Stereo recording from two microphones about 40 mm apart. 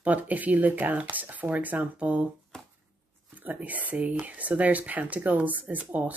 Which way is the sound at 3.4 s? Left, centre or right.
Right.